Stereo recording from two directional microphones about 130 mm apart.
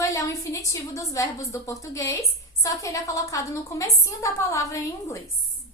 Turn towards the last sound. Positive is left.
turn(degrees=25)  # may be behind; listen again after turning